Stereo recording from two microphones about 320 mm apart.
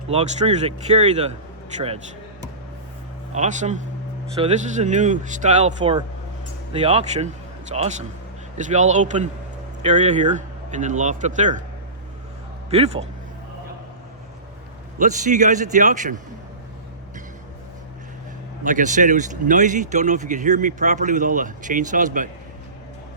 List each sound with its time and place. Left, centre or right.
0.1 s speech: centre
3.3 s speech: right
12.7 s speech: centre
14.9 s speech: right
18.6 s speech: right